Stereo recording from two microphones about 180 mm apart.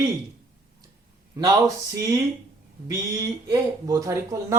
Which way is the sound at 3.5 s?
20° right (ahead or behind).